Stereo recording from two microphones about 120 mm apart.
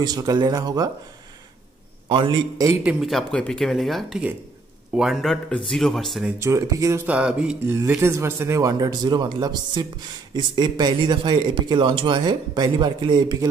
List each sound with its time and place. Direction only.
0.0 s speech: 35° right (ahead or behind)
2.0 s a man's voice: 45° right (ahead or behind)
2.8 s a sound: 10° right (ahead or behind)
3.1 s speech: 5° left (ahead or behind)
6.4 s speech: 25° right (ahead or behind)
7.1 s a sound: 10° right (ahead or behind)
7.6 s speech: 15° right (ahead or behind); by 13.5 s 35° right (ahead or behind)